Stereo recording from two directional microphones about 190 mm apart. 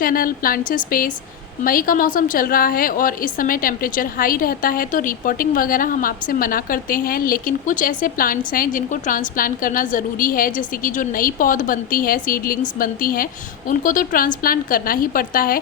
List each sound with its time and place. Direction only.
0.0 s a woman's voice: 50° left (ahead or behind)